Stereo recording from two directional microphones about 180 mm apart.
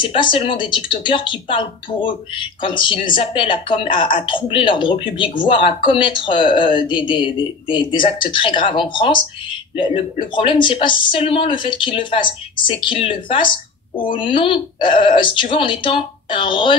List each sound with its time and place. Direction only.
0.0 s speech: 25° left (ahead or behind)